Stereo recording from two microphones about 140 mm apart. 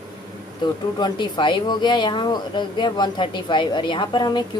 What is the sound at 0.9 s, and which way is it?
Speech, 30° left (ahead or behind).